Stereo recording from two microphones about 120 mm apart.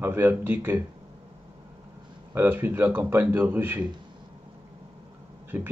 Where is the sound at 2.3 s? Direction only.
15° right (ahead or behind).